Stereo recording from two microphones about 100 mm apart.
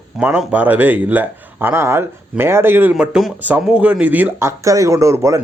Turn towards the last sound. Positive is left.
turn(degrees=-30)  # may be behind; listen again after turning